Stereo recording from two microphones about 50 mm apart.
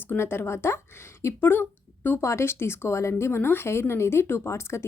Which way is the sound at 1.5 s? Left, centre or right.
Left.